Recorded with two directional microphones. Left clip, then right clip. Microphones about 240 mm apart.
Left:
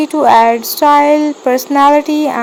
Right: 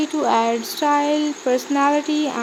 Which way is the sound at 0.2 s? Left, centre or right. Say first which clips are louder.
Left 12 dB; left.